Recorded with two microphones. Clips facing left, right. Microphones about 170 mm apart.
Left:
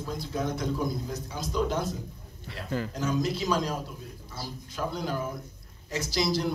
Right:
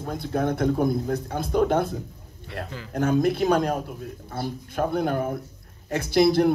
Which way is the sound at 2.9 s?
55° right (ahead or behind).